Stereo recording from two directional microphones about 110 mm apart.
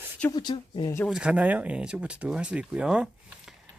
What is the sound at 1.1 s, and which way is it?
Speech, 10° right (ahead or behind).